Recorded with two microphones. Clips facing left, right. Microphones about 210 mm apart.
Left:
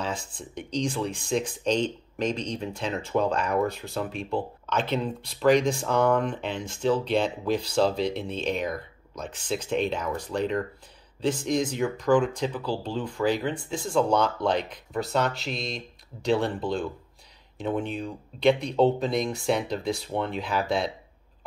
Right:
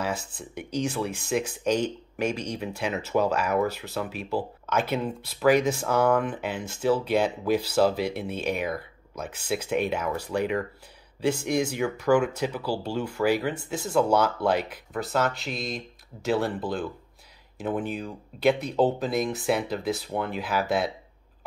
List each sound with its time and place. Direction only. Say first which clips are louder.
0.0 s speech: right 2 dB; 5° right (ahead or behind)